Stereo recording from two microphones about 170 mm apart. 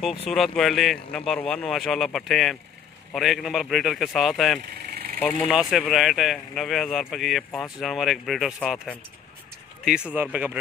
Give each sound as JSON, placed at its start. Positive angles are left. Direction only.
{"t": 0.3, "sound": "speech", "side_deg": 0}
{"t": 4.9, "sound": "vehicle", "side_deg": -65}
{"t": 5.2, "sound": "speech", "side_deg": 0}